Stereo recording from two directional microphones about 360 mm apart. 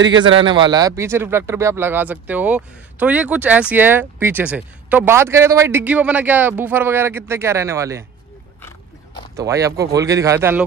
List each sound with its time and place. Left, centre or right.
0.2 s speech: centre
9.4 s speech: centre